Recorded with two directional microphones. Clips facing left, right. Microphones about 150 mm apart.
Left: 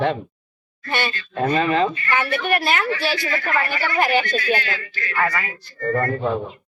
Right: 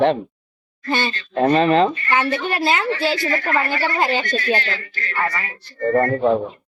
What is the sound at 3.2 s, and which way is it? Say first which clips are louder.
Speech: right 3 dB; 40° right (ahead or behind).